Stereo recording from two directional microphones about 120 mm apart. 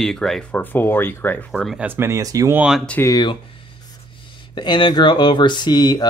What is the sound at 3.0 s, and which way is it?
Speech, 35° left (ahead or behind).